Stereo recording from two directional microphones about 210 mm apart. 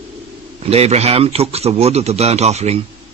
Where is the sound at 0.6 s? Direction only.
30° right (ahead or behind).